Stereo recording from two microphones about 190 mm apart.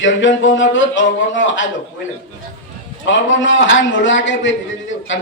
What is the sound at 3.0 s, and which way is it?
A man's voice, 80° left.